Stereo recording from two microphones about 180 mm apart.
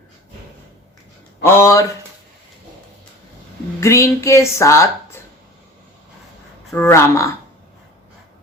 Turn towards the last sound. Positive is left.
turn(degrees=15)  # may be behind; listen again after turning